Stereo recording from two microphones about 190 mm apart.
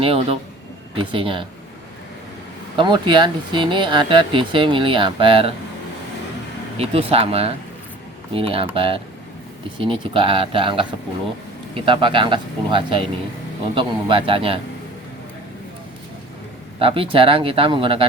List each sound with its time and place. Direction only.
0.0 s speech: 30° right (ahead or behind)
2.7 s speech: 25° right (ahead or behind)
6.7 s speech: 30° right (ahead or behind)
16.8 s speech: 30° right (ahead or behind)